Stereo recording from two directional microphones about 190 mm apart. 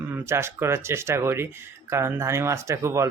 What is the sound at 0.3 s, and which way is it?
Speech, 15° right (ahead or behind).